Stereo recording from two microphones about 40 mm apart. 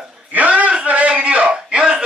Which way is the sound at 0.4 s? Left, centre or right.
Right.